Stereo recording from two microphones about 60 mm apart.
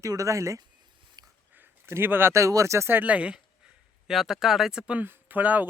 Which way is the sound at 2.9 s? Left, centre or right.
Right.